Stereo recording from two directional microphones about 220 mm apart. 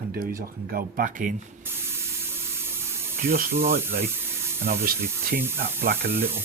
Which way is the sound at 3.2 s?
40° right (ahead or behind).